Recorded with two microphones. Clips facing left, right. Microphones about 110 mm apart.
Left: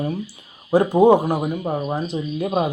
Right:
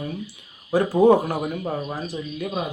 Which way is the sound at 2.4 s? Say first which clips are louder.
Left 7 dB; 40° left (ahead or behind).